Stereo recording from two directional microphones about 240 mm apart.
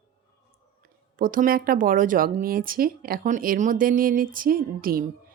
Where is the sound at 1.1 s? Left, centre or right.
Right.